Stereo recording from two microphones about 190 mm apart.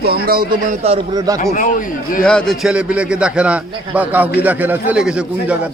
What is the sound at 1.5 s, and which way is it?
Speech, 45° left (ahead or behind).